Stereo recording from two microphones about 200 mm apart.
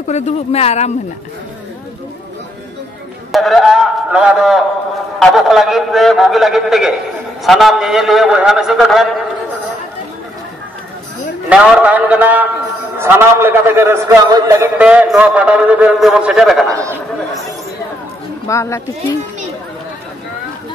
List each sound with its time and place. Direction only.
0.1 s speech: 35° left (ahead or behind)
3.3 s a man's voice: centre (ahead or behind)
11.4 s a man's voice: 5° right (ahead or behind)
18.5 s speech: 15° left (ahead or behind)